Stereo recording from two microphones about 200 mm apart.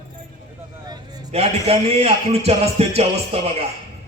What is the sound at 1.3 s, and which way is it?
A man's voice, 30° right (ahead or behind).